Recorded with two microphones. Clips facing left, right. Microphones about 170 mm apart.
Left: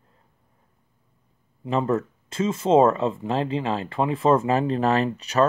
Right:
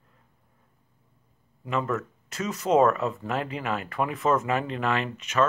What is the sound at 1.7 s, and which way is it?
Speech, 30° left (ahead or behind).